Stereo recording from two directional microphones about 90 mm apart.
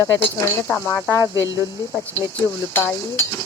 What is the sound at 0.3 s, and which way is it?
Speech, 30° left (ahead or behind).